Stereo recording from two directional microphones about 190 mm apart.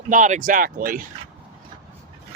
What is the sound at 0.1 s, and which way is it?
Speech, 40° right (ahead or behind).